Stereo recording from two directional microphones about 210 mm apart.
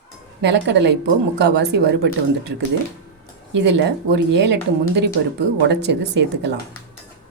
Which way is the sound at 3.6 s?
55° right (ahead or behind).